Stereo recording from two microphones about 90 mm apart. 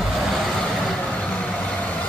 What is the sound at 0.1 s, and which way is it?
Vehicle, centre (ahead or behind).